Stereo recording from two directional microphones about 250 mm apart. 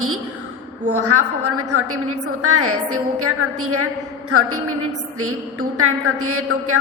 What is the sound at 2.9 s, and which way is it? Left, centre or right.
Speech, right.